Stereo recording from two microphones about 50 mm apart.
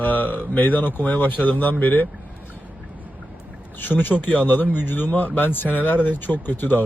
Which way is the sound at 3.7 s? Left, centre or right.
Left.